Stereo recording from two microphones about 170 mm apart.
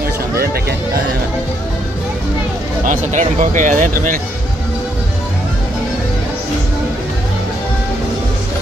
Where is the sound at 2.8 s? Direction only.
50° right (ahead or behind).